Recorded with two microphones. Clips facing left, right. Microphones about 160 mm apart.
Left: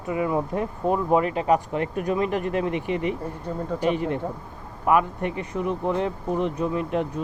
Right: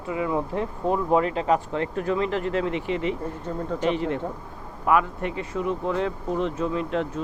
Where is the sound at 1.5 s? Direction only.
15° left (ahead or behind).